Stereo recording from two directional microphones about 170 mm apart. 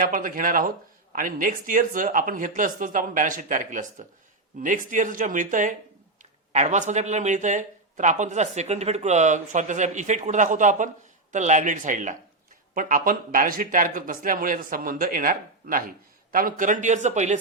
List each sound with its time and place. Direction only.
0.0 s speech: 50° right (ahead or behind)